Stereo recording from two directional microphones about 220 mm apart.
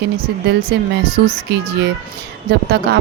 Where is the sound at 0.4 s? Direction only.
45° right (ahead or behind).